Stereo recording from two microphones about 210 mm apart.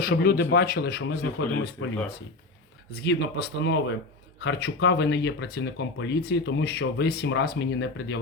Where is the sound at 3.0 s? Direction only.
50° left (ahead or behind).